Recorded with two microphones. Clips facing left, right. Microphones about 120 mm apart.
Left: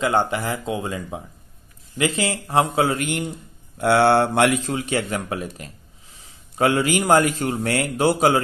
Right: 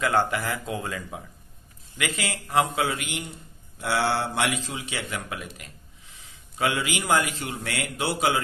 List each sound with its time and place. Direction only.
0.0 s a man's voice: 25° left (ahead or behind); by 8.4 s 45° left (ahead or behind)